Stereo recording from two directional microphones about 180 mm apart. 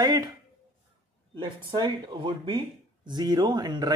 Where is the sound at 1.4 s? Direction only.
25° right (ahead or behind).